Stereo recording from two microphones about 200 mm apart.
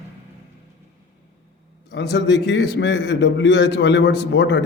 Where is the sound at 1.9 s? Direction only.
60° left (ahead or behind).